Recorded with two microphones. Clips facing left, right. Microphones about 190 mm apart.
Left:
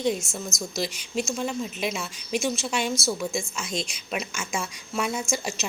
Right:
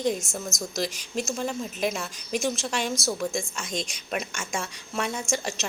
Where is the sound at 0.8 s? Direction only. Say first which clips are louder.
Left 2 dB; 40° right (ahead or behind).